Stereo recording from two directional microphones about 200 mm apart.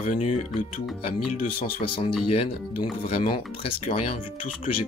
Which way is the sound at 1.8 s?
25° left (ahead or behind).